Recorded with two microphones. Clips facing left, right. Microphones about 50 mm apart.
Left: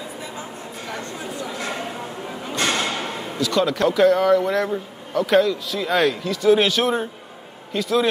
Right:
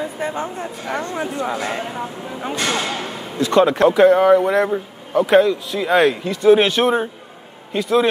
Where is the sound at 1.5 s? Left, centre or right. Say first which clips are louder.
Right 4 dB; right.